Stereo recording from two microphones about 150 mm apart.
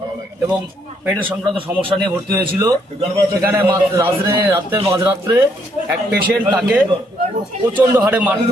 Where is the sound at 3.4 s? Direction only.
15° right (ahead or behind).